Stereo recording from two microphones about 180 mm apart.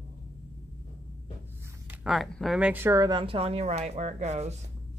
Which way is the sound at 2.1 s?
Centre (ahead or behind).